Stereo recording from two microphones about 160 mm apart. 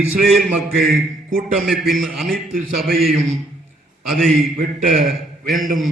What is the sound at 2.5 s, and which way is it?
Speech, 60° right (ahead or behind).